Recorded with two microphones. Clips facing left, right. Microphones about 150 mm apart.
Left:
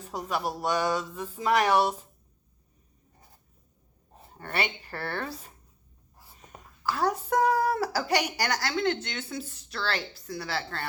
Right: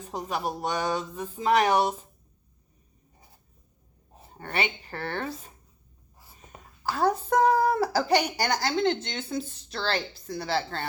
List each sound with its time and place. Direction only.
0.2 s speech: 20° right (ahead or behind)
4.4 s speech: 25° right (ahead or behind)
7.1 s speech: 25° right (ahead or behind)